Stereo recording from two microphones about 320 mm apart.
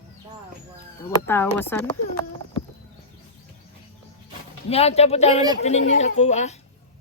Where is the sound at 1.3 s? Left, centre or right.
Centre.